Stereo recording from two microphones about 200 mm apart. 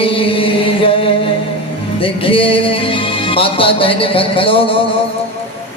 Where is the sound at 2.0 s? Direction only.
25° left (ahead or behind).